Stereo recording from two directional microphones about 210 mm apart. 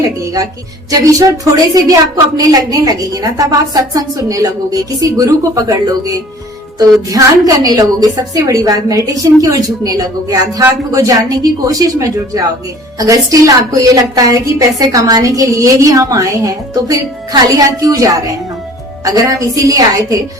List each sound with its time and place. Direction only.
0.9 s a woman's voice: 15° right (ahead or behind)